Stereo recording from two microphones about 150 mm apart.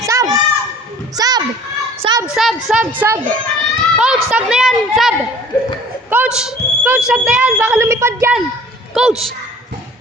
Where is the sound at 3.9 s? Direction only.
5° right (ahead or behind).